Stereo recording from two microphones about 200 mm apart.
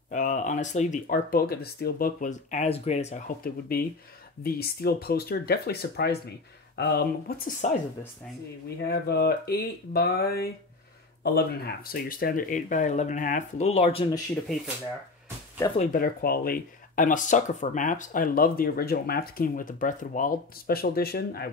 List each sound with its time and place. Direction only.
0.1 s speech: 40° left (ahead or behind)
3.4 s speech: 50° left (ahead or behind); by 14.0 s 30° left (ahead or behind)
15.8 s speech: 45° left (ahead or behind)